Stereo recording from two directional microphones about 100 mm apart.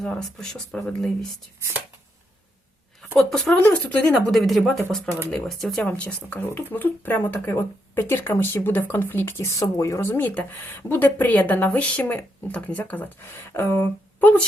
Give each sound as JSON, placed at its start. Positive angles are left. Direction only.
{"t": 0.0, "sound": "speech", "side_deg": 5}
{"t": 3.2, "sound": "speech", "side_deg": 5}
{"t": 5.8, "sound": "speech", "side_deg": 15}